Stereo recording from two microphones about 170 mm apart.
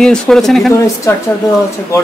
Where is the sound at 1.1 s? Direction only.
15° left (ahead or behind).